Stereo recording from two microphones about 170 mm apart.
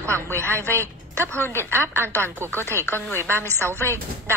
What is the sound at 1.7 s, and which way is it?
Speech, 15° right (ahead or behind).